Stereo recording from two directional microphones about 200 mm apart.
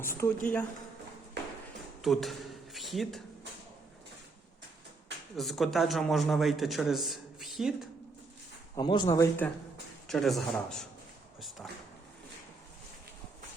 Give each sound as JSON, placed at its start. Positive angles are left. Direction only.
{"t": 0.1, "sound": "speech", "side_deg": 10}
{"t": 2.0, "sound": "a man's voice", "side_deg": 0}
{"t": 5.4, "sound": "a man's voice", "side_deg": 0}
{"t": 8.7, "sound": "speech", "side_deg": 20}
{"t": 10.1, "sound": "a man's voice", "side_deg": 0}
{"t": 11.3, "sound": "a sound", "side_deg": 0}